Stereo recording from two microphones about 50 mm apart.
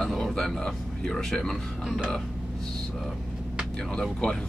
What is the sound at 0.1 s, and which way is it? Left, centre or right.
Speech, centre.